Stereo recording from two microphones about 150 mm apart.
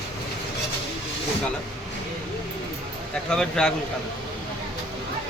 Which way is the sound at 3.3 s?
5° left (ahead or behind).